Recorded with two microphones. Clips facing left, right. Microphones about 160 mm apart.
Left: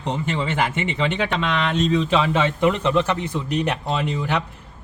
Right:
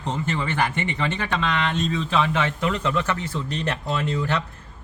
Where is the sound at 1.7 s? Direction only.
75° left (ahead or behind).